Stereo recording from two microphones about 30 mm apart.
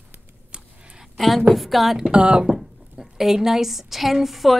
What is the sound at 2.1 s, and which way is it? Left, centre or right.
Speech, right.